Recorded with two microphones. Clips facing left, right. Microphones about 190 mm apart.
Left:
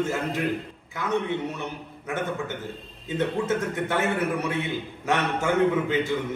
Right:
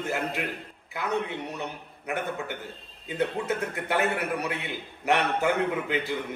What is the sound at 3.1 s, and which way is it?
A man's voice, 15° right (ahead or behind).